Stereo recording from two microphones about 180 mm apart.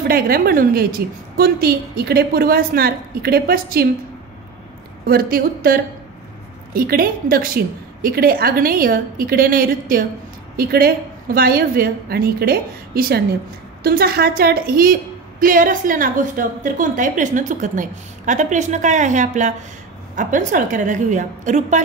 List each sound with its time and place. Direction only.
0.1 s a woman's voice: 55° right (ahead or behind)
5.0 s a woman's voice: 55° right (ahead or behind)